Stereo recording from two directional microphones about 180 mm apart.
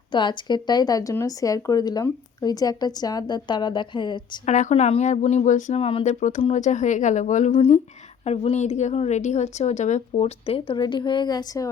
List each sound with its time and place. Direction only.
0.1 s speech: 25° left (ahead or behind)
4.4 s a woman's voice: 40° left (ahead or behind); by 11.7 s 20° left (ahead or behind)